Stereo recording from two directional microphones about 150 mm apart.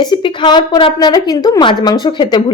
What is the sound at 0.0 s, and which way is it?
A woman's voice, 35° left (ahead or behind).